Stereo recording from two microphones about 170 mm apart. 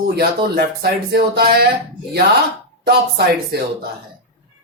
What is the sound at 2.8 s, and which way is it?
Speech, 70° right (ahead or behind).